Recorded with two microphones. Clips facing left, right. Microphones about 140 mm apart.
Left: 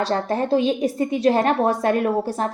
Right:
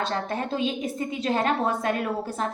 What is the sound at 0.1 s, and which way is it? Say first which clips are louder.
A woman's voice: left 8 dB; 35° left (ahead or behind).